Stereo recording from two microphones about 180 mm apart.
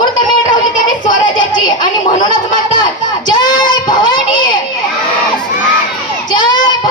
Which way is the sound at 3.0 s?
25° left (ahead or behind).